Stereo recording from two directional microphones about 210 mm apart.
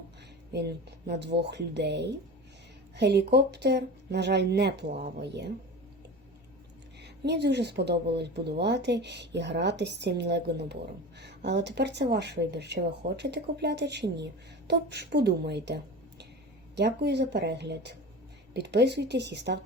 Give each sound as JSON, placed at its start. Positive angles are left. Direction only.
{"t": 0.5, "sound": "speech", "side_deg": -50}
{"t": 7.0, "sound": "a woman's voice", "side_deg": -55}